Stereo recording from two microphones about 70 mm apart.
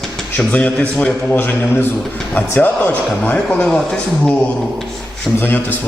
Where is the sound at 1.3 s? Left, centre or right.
Left; by 4.3 s centre.